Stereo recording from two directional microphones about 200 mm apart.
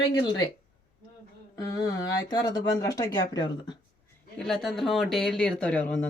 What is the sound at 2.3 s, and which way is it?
Speech, 15° left (ahead or behind).